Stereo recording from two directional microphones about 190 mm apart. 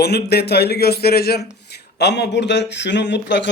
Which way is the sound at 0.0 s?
60° left (ahead or behind).